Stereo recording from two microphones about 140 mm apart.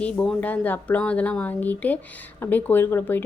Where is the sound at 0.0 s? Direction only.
5° left (ahead or behind).